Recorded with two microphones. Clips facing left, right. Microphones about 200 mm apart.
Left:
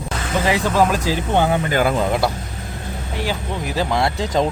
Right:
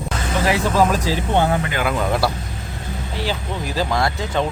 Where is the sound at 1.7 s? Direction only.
40° left (ahead or behind).